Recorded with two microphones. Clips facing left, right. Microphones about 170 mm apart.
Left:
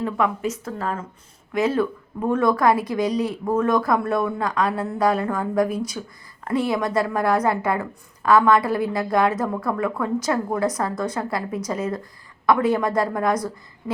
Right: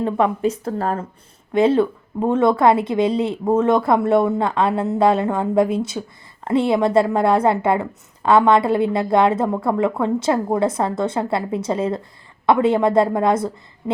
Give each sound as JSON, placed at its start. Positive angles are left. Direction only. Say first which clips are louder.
{"t": 0.0, "sound": "a woman's voice", "louder": "right 5 dB", "side_deg": -30}